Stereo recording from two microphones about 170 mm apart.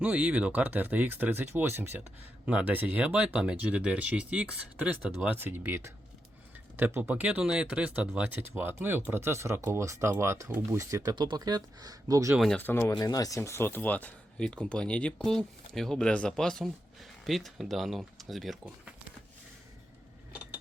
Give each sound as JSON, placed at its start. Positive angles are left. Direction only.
{"t": 0.0, "sound": "speech", "side_deg": -5}
{"t": 12.3, "sound": "speech", "side_deg": 0}
{"t": 12.9, "sound": "speech", "side_deg": 20}